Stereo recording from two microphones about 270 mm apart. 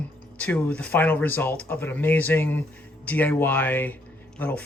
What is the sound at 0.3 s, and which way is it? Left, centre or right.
Speech, centre.